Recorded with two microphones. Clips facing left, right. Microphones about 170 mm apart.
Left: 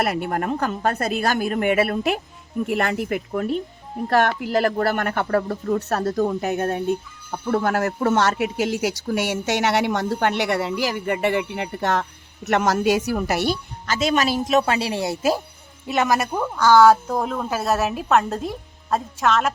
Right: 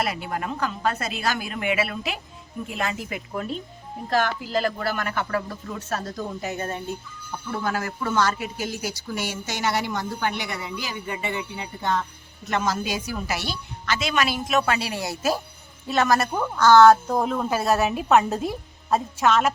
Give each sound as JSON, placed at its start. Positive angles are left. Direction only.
{"t": 0.0, "sound": "a woman's voice", "side_deg": 55}
{"t": 15.9, "sound": "speech", "side_deg": 15}